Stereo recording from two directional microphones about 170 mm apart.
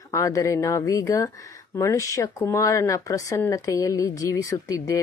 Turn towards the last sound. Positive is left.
turn(degrees=20)  # may be behind; listen again after turning